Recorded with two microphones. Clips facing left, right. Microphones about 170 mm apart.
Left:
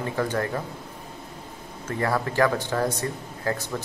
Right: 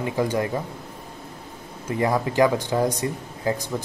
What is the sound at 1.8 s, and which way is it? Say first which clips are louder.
Speech: right 3 dB; 15° right (ahead or behind).